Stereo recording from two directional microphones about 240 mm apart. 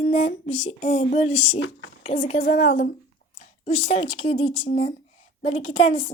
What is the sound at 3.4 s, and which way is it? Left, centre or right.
A woman's voice, left.